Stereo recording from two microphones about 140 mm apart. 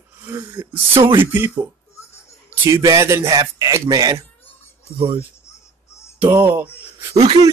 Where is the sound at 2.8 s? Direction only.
25° right (ahead or behind).